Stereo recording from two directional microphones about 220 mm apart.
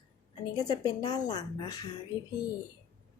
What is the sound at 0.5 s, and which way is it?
Speech, 20° left (ahead or behind).